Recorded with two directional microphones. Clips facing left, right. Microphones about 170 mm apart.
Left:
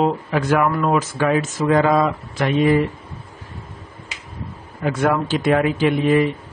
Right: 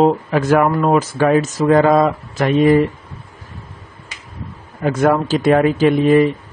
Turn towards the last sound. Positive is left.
turn(degrees=-40)  # may be behind; listen again after turning